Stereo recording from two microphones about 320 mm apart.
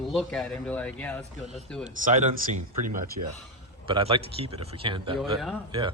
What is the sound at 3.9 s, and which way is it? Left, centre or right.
A man's voice, centre.